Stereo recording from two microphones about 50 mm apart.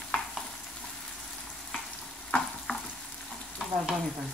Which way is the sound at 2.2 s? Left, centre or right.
Centre.